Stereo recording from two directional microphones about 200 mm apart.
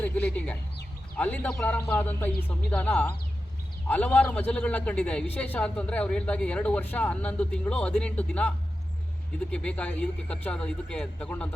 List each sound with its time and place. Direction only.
0.0 s a man's voice: 10° left (ahead or behind)